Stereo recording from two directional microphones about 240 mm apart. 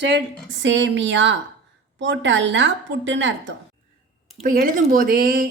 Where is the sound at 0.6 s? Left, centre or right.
Right.